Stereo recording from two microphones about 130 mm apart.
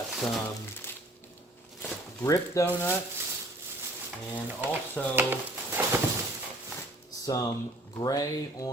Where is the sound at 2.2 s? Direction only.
25° left (ahead or behind).